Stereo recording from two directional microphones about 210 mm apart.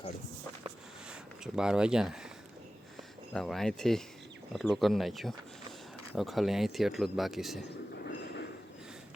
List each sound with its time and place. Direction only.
1.5 s speech: 5° right (ahead or behind)
3.3 s speech: centre (ahead or behind)
7.9 s train: 50° left (ahead or behind)